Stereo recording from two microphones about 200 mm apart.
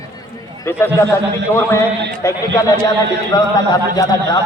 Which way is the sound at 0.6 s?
10° left (ahead or behind).